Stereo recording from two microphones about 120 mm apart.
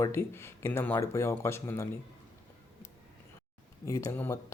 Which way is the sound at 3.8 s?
25° left (ahead or behind).